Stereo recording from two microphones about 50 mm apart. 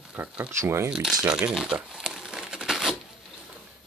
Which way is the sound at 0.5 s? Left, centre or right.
Right.